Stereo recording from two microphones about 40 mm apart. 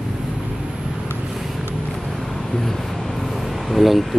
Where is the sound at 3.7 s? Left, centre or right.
Centre.